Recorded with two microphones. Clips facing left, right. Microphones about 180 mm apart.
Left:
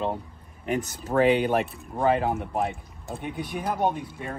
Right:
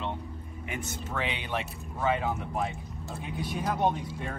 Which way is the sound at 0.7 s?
40° left (ahead or behind).